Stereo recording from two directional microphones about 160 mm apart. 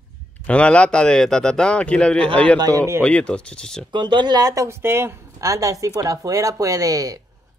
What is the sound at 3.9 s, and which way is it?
Speech, 30° right (ahead or behind).